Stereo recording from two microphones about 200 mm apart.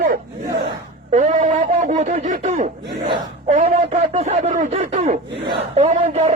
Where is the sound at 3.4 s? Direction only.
35° right (ahead or behind).